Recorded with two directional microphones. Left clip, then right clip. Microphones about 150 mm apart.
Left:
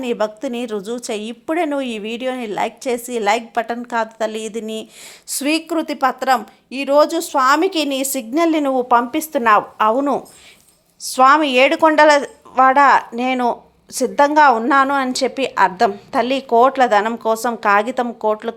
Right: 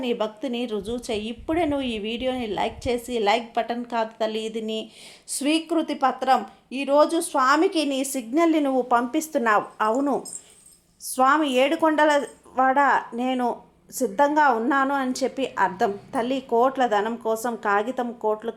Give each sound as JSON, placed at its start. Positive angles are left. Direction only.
{"t": 0.0, "sound": "a woman's voice", "side_deg": 30}